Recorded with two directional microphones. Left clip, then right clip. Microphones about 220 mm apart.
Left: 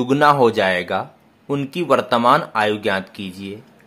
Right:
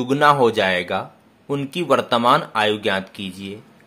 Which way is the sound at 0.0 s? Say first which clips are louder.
Left 1 dB; 10° left (ahead or behind).